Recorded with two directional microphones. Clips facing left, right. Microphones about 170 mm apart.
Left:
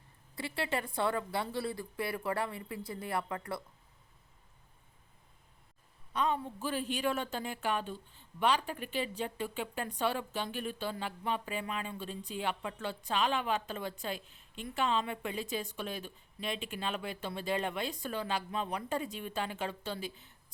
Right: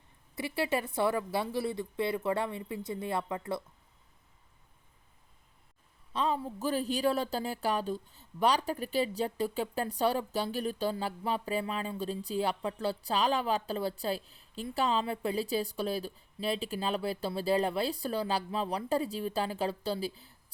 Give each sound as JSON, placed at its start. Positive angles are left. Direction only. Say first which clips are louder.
{"t": 0.3, "sound": "speech", "louder": "right 4 dB", "side_deg": -25}
{"t": 6.1, "sound": "a woman's voice", "louder": "right 1 dB", "side_deg": -30}